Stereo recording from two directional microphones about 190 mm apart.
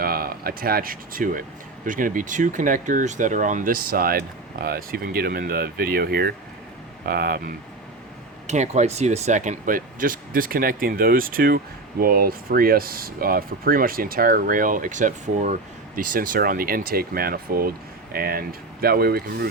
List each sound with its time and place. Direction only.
0.0 s speech: 50° right (ahead or behind)
8.4 s speech: 35° right (ahead or behind); by 19.5 s 55° right (ahead or behind)